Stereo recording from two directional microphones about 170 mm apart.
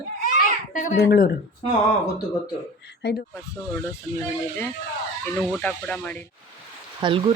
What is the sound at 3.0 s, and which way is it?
Speech, 75° left (ahead or behind).